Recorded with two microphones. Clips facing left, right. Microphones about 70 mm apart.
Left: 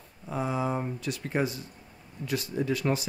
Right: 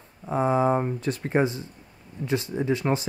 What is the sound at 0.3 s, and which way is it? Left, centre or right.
Speech, right.